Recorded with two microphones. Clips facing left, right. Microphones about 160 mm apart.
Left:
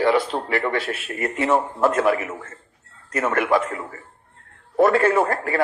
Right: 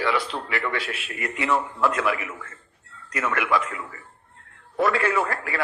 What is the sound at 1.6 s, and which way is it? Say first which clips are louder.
Speech: left 4 dB; 30° left (ahead or behind).